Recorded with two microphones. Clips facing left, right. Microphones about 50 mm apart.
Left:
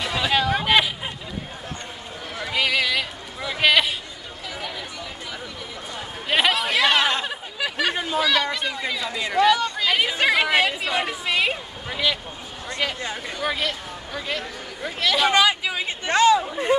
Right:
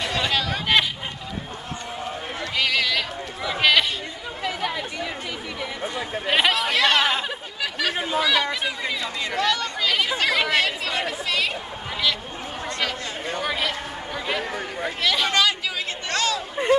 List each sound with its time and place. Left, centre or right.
0.0 s chatter: centre
2.5 s a sound: centre
4.4 s chatter: right
6.3 s chatter: centre
7.6 s a sound: centre
8.0 s speech: centre
9.2 s a woman's voice: centre
12.6 s a woman's voice: centre
13.4 s speech: centre
15.3 s speech: centre